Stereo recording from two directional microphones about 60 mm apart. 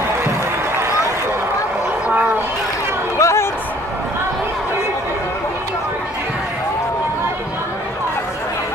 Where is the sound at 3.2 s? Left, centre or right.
Left.